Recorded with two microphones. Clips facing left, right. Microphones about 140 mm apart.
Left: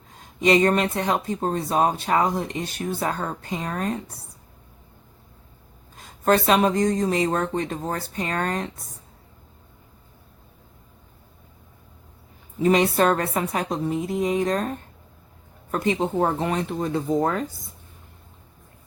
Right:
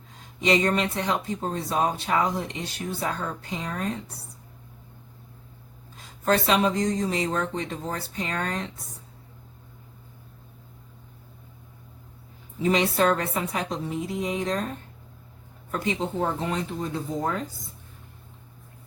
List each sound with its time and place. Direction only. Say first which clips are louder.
0.4 s speech: left 4 dB; 50° left (ahead or behind)
6.2 s speech: left 3 dB; 50° left (ahead or behind)
12.6 s speech: left 3 dB; 50° left (ahead or behind)
15.7 s speech: left 5 dB; 50° left (ahead or behind)